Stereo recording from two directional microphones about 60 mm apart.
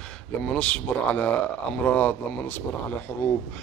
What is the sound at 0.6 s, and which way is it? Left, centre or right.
A man's voice, left.